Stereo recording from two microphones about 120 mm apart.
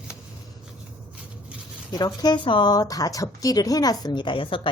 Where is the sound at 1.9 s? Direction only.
35° left (ahead or behind).